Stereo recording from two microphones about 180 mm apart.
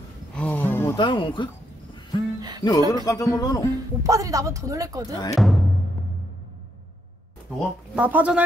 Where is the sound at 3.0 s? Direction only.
20° left (ahead or behind).